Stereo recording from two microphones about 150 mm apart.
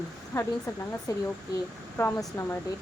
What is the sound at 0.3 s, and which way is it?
A woman's voice, 20° left (ahead or behind).